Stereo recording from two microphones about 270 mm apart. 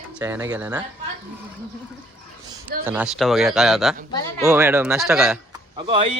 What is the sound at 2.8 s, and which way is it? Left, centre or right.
A man's voice, centre.